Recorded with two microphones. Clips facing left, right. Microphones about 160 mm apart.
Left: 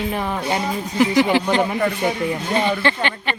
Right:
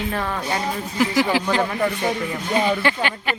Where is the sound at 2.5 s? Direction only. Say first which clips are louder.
Right 2 dB; 5° right (ahead or behind).